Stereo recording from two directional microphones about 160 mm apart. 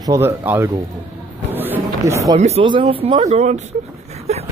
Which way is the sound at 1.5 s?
10° right (ahead or behind).